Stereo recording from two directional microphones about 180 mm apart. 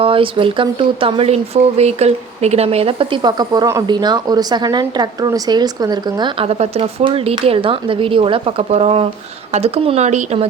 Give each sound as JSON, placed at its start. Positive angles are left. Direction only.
{"t": 0.0, "sound": "speech", "side_deg": -30}